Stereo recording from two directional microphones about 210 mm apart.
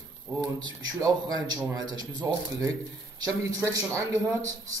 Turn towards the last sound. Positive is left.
turn(degrees=-15)  # may be behind; listen again after turning